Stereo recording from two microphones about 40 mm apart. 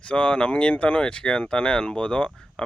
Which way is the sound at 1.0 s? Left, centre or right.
Left.